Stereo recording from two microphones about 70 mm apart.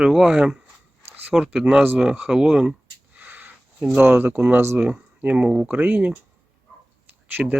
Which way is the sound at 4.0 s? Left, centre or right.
Right.